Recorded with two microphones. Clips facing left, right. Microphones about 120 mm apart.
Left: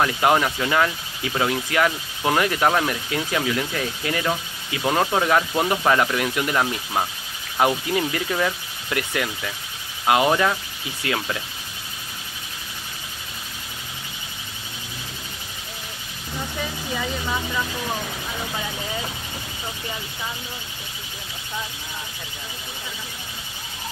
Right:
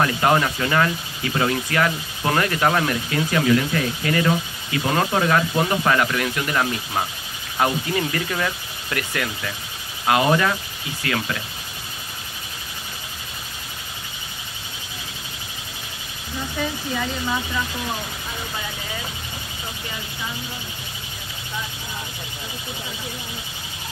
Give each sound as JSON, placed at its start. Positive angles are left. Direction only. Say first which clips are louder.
{"t": 0.0, "sound": "speech", "louder": "even", "side_deg": 10}